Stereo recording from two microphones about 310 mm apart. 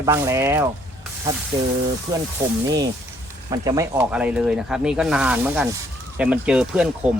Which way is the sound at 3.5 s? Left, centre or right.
Centre.